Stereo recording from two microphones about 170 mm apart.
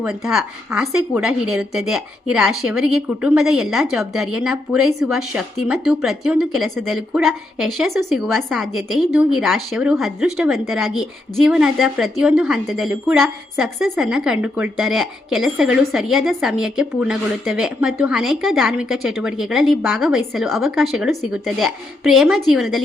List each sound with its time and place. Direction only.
0.0 s a woman's voice: 5° right (ahead or behind)